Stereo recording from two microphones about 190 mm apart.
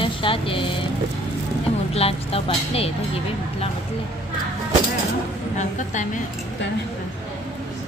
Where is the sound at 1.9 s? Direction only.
30° left (ahead or behind).